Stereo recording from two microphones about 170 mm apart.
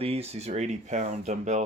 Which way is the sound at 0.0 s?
35° right (ahead or behind).